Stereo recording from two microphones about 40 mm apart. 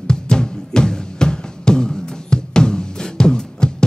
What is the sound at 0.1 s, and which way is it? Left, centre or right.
Music, centre.